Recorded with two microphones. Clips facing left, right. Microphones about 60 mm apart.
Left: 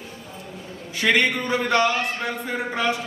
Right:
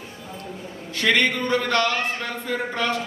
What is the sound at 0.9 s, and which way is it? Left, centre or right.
Speech, centre.